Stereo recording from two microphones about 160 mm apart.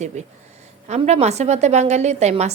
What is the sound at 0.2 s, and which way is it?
A woman's voice, 45° right (ahead or behind).